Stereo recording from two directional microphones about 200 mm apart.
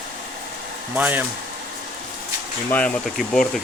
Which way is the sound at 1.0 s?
10° right (ahead or behind).